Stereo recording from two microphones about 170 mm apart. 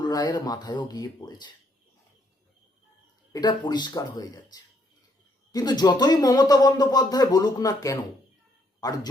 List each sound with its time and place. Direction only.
0.0 s speech: 25° left (ahead or behind)
3.3 s speech: 25° left (ahead or behind)
5.5 s speech: 25° left (ahead or behind)